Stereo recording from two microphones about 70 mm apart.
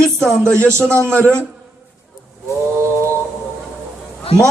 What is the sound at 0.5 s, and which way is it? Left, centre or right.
Speech, right.